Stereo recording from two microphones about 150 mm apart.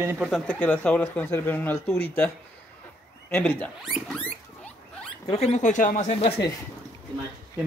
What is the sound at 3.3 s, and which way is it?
Speech, 10° left (ahead or behind).